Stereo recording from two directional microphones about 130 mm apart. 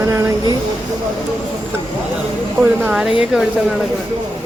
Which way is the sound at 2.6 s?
10° right (ahead or behind).